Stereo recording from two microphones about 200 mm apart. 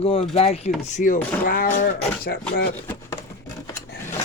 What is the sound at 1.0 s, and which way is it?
Speech, 40° left (ahead or behind).